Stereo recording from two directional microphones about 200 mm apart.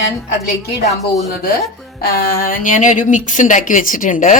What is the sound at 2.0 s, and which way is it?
A woman's voice, 50° left (ahead or behind).